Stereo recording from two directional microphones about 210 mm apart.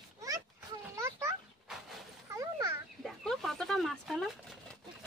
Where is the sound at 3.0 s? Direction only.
Centre (ahead or behind).